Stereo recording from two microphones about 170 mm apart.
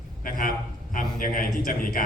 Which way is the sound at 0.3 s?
55° left (ahead or behind).